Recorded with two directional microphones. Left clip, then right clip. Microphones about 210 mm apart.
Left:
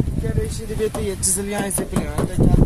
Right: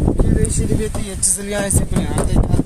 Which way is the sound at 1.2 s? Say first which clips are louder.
Right 3 dB; 40° right (ahead or behind).